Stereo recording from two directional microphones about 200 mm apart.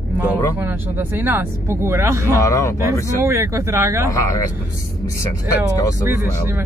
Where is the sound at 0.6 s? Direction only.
10° right (ahead or behind).